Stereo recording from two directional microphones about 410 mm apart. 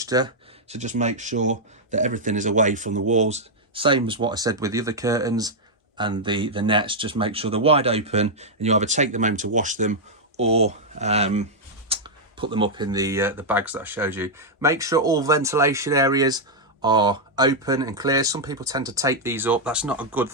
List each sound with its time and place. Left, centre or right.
0.0 s speech: centre